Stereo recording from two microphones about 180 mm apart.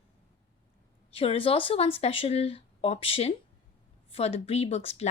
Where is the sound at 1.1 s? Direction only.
35° left (ahead or behind).